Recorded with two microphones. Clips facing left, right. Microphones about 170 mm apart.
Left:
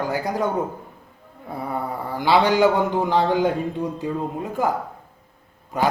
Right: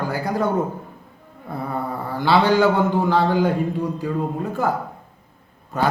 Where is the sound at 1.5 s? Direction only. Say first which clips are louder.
Right 1 dB; 10° left (ahead or behind).